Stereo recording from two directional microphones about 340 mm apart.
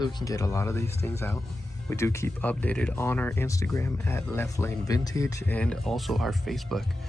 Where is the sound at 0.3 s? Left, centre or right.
Centre.